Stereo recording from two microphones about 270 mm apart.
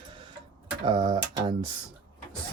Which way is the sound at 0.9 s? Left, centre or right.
Centre.